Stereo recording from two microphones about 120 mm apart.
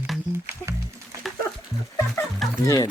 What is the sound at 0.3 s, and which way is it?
Music, 20° right (ahead or behind).